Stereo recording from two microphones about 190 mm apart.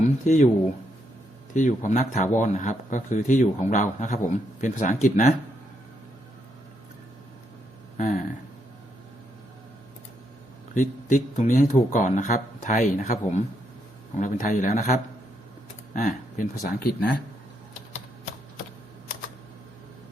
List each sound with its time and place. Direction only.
0.0 s speech: 40° left (ahead or behind)
1.5 s speech: 40° left (ahead or behind)
10.8 s speech: 40° left (ahead or behind)